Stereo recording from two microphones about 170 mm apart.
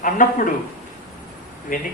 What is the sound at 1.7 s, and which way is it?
Speech, 55° left (ahead or behind).